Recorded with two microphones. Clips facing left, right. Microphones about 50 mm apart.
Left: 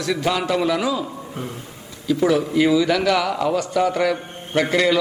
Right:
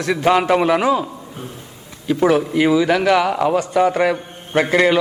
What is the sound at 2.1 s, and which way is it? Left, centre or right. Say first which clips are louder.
A man's voice: right 3 dB; right.